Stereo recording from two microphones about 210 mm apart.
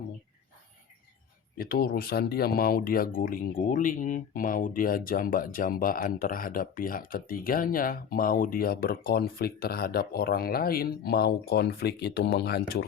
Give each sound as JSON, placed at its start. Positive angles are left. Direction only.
{"t": 1.5, "sound": "speech", "side_deg": 45}